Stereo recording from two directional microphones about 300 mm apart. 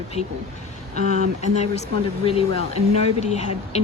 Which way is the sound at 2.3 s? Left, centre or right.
Centre.